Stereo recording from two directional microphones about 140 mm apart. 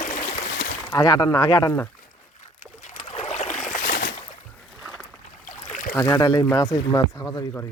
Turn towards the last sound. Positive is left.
turn(degrees=25)  # may be behind; listen again after turning